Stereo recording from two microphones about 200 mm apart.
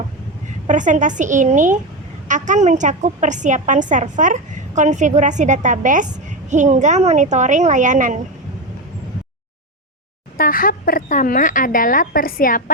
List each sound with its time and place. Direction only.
0.7 s a woman's voice: 40° right (ahead or behind)
10.3 s speech: 45° left (ahead or behind)